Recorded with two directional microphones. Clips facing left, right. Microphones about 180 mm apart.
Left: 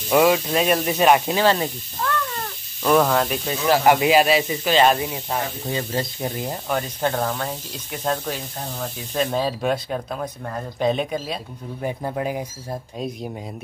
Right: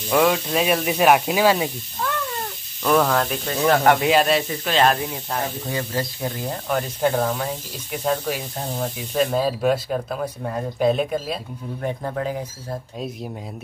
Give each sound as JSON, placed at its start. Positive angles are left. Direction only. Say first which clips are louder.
{"t": 0.1, "sound": "speech", "louder": "left 2 dB", "side_deg": 5}
{"t": 2.8, "sound": "speech", "louder": "left 1 dB", "side_deg": 5}
{"t": 5.7, "sound": "speech", "louder": "even", "side_deg": 25}
{"t": 6.7, "sound": "speech", "louder": "right 3 dB", "side_deg": -5}
{"t": 11.8, "sound": "speech", "louder": "left 1 dB", "side_deg": 15}